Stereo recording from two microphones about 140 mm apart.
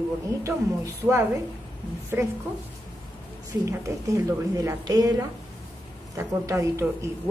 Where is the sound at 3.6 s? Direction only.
20° right (ahead or behind).